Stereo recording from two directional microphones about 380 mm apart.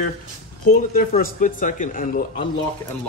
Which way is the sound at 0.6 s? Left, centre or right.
Left.